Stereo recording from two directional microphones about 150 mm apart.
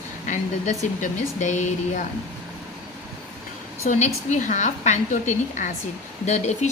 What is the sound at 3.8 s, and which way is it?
A woman's voice, 50° left (ahead or behind).